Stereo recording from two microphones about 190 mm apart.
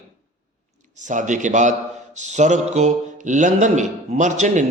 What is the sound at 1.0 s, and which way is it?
A man's voice, 40° right (ahead or behind).